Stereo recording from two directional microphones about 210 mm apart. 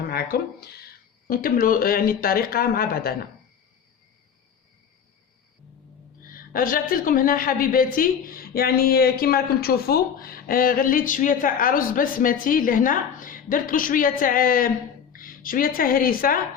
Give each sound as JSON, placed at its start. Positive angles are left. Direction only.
{"t": 0.0, "sound": "speech", "side_deg": 45}
{"t": 6.3, "sound": "a woman's voice", "side_deg": 40}